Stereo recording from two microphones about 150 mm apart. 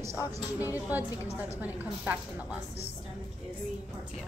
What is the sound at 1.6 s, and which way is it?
Speech, 10° right (ahead or behind).